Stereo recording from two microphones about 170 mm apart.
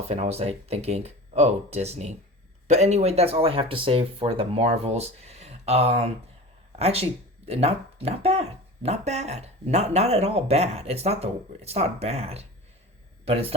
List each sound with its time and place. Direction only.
0.1 s speech: 40° right (ahead or behind)